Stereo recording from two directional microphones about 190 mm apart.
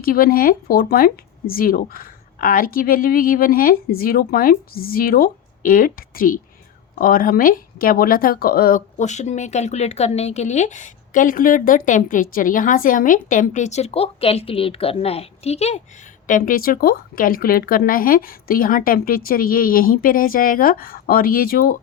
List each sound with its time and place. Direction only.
0.0 s speech: 50° left (ahead or behind); by 15.8 s 35° left (ahead or behind)
16.2 s speech: 45° left (ahead or behind)